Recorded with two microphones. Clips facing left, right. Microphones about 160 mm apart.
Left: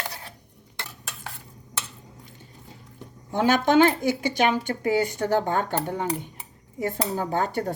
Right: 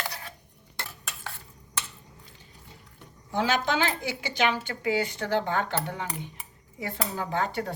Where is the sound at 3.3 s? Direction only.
50° left (ahead or behind).